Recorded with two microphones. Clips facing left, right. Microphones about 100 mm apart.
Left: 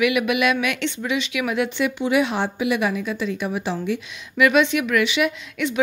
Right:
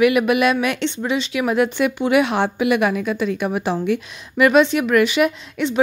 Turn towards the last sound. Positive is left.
turn(degrees=-30)  # may be behind; listen again after turning